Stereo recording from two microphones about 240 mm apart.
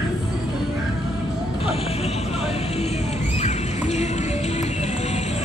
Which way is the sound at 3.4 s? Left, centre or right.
Left.